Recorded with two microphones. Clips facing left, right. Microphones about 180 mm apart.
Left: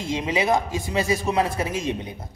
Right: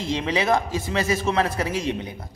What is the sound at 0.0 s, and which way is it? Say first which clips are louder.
A man's voice: even; 15° left (ahead or behind).